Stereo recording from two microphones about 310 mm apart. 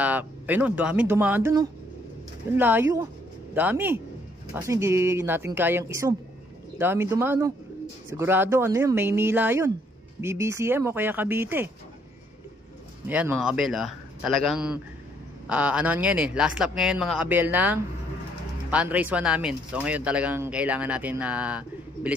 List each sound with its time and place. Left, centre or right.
0.0 s speech: centre
13.1 s speech: centre